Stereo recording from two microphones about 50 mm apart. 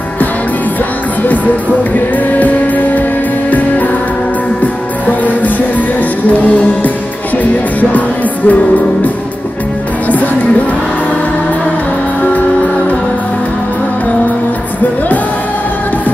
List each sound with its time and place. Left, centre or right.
1.2 s music: left
8.5 s music: left